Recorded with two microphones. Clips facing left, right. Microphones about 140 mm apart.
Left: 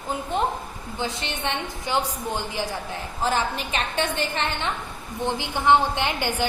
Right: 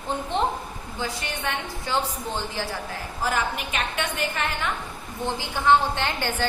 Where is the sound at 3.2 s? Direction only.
30° left (ahead or behind).